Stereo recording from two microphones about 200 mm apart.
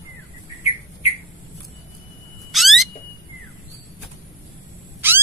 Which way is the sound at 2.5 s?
Centre (ahead or behind).